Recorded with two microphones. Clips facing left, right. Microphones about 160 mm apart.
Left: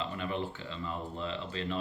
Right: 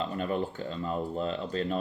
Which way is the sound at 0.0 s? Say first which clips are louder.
Right 5 dB; 45° right (ahead or behind).